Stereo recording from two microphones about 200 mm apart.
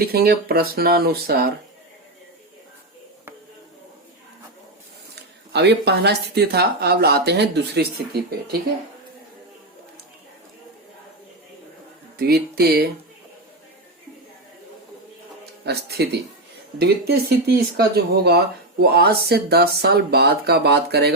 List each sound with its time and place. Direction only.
0.0 s speech: 50° right (ahead or behind)
5.5 s speech: 55° right (ahead or behind)
12.1 s speech: 50° right (ahead or behind)
15.6 s speech: 55° right (ahead or behind)